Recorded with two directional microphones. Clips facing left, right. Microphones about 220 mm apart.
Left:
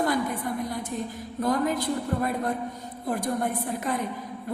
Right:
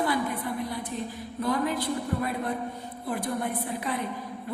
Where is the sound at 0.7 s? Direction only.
45° left (ahead or behind).